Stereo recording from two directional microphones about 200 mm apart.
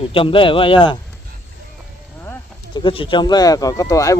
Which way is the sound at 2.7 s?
25° left (ahead or behind).